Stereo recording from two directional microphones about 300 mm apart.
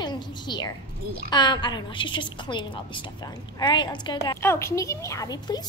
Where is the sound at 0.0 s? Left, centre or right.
Centre.